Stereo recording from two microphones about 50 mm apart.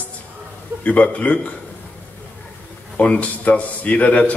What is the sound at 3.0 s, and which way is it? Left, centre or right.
A man's voice, left.